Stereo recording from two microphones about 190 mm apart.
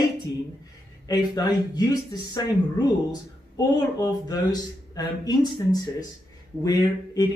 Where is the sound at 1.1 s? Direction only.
20° left (ahead or behind).